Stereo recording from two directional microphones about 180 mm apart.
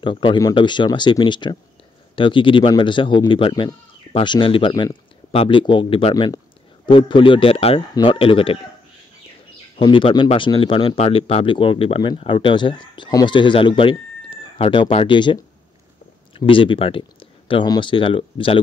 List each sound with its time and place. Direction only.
0.0 s speech: 25° left (ahead or behind)
9.8 s speech: 30° left (ahead or behind)